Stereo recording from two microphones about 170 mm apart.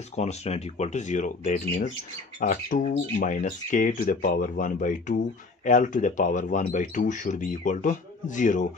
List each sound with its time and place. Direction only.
0.1 s speech: 40° left (ahead or behind)